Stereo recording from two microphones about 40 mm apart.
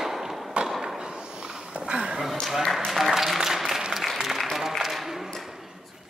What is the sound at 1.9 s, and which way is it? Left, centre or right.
Dog, right.